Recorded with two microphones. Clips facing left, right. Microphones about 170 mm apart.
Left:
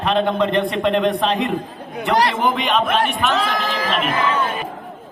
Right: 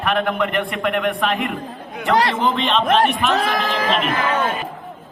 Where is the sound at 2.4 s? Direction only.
20° left (ahead or behind).